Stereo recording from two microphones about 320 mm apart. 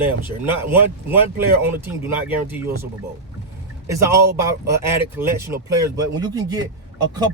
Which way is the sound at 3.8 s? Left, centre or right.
Centre.